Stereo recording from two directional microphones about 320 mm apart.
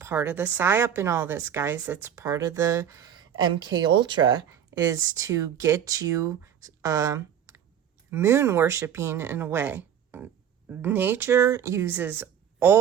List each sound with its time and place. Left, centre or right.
0.0 s a woman's voice: centre